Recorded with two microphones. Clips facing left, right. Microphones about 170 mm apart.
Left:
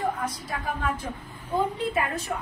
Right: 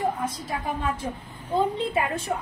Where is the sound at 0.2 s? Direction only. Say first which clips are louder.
Right 2 dB; 25° right (ahead or behind).